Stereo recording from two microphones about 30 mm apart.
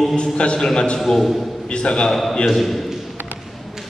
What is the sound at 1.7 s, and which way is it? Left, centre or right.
Speech, left.